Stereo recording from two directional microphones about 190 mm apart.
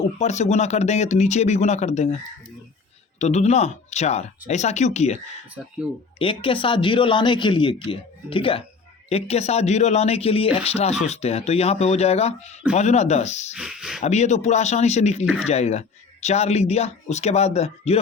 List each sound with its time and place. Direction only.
0.2 s speech: 35° left (ahead or behind)
3.2 s speech: 35° left (ahead or behind)
5.6 s speech: centre (ahead or behind)
6.1 s speech: 25° left (ahead or behind)
13.5 s speech: 5° right (ahead or behind)
14.0 s speech: 35° left (ahead or behind)